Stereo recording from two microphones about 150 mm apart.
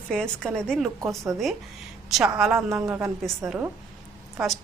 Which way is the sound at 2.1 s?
Centre (ahead or behind).